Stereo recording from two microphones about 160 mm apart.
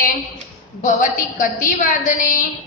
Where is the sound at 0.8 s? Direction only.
55° left (ahead or behind).